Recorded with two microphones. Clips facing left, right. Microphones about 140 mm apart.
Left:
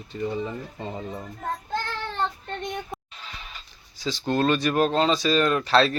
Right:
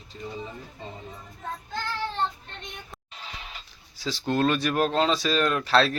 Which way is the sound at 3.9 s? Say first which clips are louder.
Left 2 dB; centre (ahead or behind).